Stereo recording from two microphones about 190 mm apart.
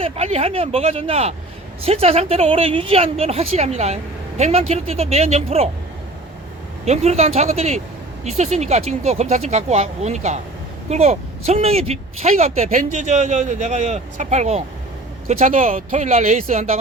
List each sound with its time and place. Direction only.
0.0 s speech: 30° right (ahead or behind)
6.8 s speech: 35° right (ahead or behind)